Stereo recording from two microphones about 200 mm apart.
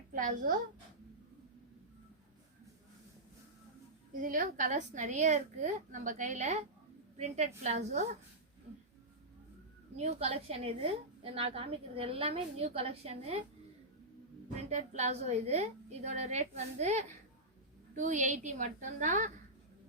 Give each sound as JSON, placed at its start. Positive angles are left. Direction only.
{"t": 0.1, "sound": "a woman's voice", "side_deg": -40}
{"t": 4.1, "sound": "a woman's voice", "side_deg": -40}
{"t": 10.0, "sound": "a woman's voice", "side_deg": -30}
{"t": 14.7, "sound": "a woman's voice", "side_deg": -35}